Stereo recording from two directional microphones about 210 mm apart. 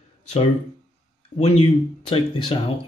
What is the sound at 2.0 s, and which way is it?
Speech, 25° left (ahead or behind).